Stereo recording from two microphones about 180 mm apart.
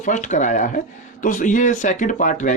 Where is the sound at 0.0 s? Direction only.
40° left (ahead or behind).